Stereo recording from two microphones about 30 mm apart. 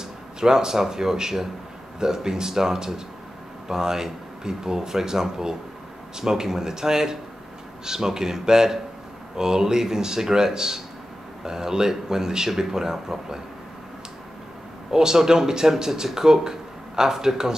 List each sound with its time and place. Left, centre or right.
0.4 s speech: right
14.9 s speech: centre